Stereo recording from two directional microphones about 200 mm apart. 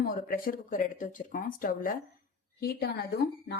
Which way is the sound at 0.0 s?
45° left (ahead or behind).